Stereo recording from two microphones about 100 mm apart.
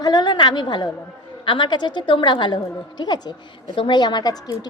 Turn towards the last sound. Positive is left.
turn(degrees=45)  # may be behind; listen again after turning